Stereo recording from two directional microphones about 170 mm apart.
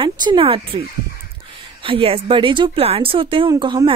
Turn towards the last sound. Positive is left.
turn(degrees=-25)  # may be behind; listen again after turning